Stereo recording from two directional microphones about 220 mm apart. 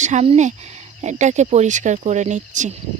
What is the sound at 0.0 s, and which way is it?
Speech, 30° right (ahead or behind).